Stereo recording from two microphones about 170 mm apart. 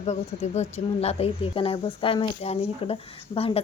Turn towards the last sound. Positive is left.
turn(degrees=35)  # may be behind; listen again after turning